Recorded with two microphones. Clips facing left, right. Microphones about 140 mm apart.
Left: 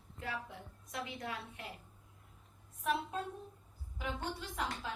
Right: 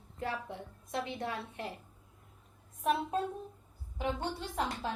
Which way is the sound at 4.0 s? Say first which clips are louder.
Right 5 dB; 30° right (ahead or behind).